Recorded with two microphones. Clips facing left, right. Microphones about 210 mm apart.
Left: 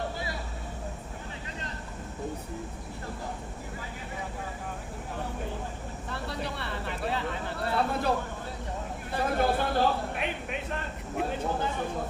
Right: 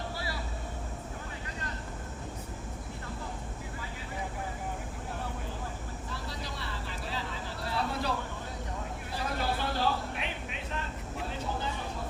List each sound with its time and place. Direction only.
6.1 s vehicle: 60° left (ahead or behind)
9.1 s a sound: 55° left (ahead or behind)
11.2 s vehicle: 55° left (ahead or behind)